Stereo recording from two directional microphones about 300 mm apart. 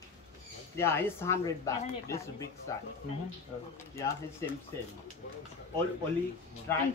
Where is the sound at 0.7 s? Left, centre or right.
Centre.